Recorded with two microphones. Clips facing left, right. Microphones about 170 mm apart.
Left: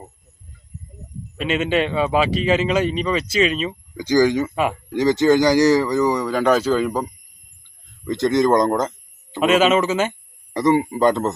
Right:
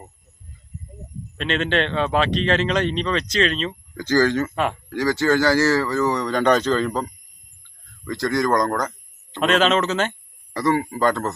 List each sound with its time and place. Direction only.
1.4 s speech: 5° left (ahead or behind)
4.9 s speech: 20° left (ahead or behind)
8.0 s speech: 20° left (ahead or behind)
9.3 s speech: 5° left (ahead or behind)
10.5 s speech: 20° left (ahead or behind)